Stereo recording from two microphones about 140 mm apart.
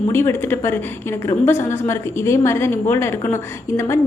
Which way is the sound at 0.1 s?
15° left (ahead or behind).